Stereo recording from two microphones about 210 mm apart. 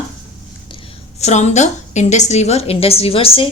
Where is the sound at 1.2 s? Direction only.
35° left (ahead or behind).